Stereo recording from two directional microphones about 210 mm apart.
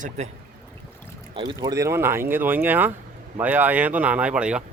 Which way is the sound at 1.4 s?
20° right (ahead or behind).